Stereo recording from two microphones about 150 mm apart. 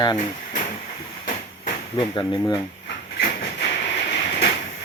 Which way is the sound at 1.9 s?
35° left (ahead or behind).